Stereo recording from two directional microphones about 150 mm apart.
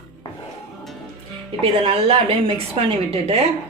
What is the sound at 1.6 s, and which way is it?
A woman's voice, 40° right (ahead or behind).